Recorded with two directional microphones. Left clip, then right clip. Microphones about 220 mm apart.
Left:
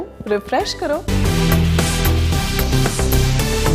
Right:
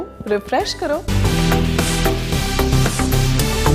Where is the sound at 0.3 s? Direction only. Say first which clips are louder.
Even; centre (ahead or behind).